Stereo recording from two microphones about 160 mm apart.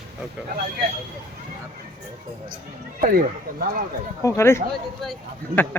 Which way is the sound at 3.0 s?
65° right (ahead or behind).